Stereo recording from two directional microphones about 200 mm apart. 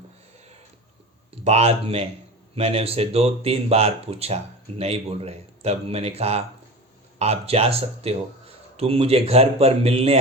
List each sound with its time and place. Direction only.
1.3 s speech: 30° right (ahead or behind)